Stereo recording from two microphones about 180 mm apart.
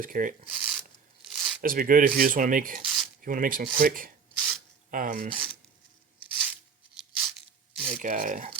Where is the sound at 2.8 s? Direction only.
5° right (ahead or behind).